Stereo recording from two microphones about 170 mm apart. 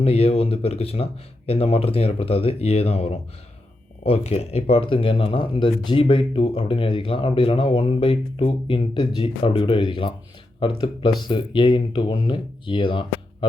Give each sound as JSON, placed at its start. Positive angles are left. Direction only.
{"t": 0.0, "sound": "speech", "side_deg": 35}